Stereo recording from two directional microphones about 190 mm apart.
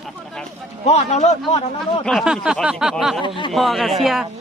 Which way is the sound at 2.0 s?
Centre (ahead or behind).